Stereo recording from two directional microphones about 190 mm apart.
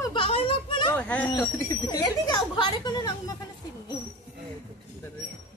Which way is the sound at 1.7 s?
20° left (ahead or behind).